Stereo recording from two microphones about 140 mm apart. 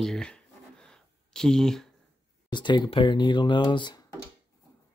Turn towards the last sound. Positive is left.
turn(degrees=35)  # may be behind; listen again after turning